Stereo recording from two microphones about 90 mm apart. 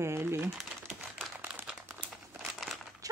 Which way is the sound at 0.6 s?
Centre (ahead or behind).